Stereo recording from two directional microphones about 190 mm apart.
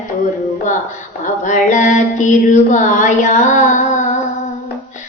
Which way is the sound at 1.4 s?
40° left (ahead or behind).